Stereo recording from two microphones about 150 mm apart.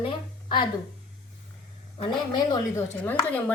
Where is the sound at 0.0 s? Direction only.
35° left (ahead or behind).